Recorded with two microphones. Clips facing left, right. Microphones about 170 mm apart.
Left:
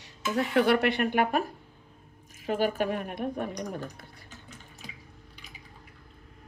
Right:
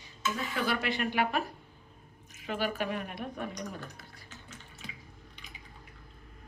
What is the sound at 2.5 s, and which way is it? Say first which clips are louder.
A woman's voice: left 6 dB; 45° left (ahead or behind).